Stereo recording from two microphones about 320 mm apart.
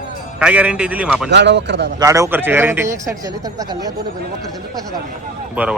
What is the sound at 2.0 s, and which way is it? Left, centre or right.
A man's voice, centre.